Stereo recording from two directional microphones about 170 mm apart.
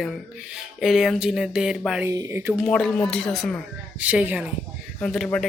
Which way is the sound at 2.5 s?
5° left (ahead or behind).